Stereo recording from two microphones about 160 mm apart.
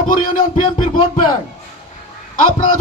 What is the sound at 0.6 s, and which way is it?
Music, 30° left (ahead or behind).